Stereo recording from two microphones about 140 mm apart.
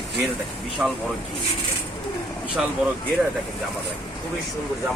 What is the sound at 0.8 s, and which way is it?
Speech, 10° right (ahead or behind).